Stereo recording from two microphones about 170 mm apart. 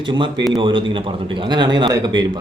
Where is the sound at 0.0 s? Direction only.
30° right (ahead or behind).